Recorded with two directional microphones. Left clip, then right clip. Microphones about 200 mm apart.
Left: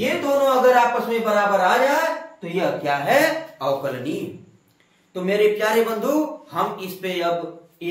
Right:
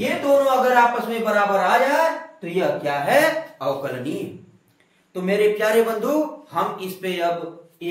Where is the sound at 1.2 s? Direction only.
10° left (ahead or behind).